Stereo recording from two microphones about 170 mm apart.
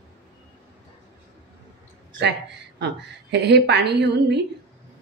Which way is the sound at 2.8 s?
90° right.